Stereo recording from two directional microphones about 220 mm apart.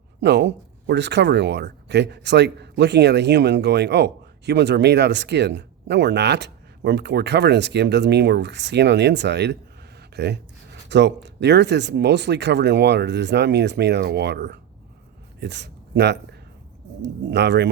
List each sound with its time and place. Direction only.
0.2 s speech: 50° right (ahead or behind)